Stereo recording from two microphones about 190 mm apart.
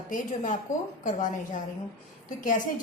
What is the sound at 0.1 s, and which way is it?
Speech, 45° left (ahead or behind).